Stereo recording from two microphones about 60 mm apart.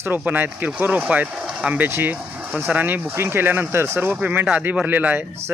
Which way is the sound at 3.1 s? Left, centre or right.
Right.